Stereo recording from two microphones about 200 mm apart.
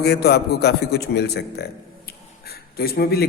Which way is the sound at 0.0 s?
55° left (ahead or behind).